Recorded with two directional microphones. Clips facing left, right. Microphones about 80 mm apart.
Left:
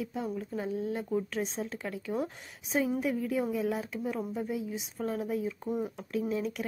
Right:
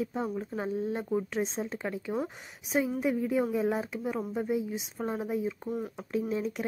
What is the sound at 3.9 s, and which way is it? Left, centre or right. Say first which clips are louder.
Speech: right 1 dB; centre.